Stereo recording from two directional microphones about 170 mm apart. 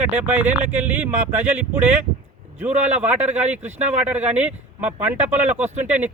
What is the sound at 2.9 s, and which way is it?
Speech, 10° right (ahead or behind).